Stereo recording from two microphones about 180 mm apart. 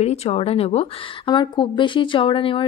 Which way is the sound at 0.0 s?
35° left (ahead or behind).